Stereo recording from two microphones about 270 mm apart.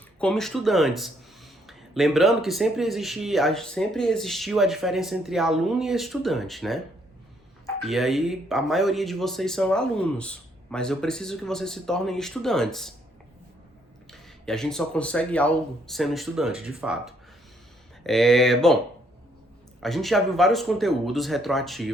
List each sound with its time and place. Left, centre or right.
0.2 s speech: centre
7.9 s speech: centre
14.1 s speech: centre
19.8 s speech: centre